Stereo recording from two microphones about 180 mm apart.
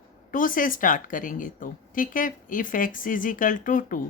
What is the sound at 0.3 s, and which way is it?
A woman's voice, 50° left (ahead or behind).